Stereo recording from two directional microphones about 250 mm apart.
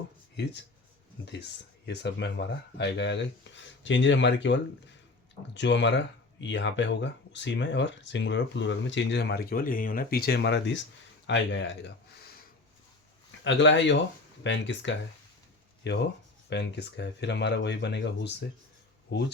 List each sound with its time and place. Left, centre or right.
1.2 s speech: left
13.4 s speech: left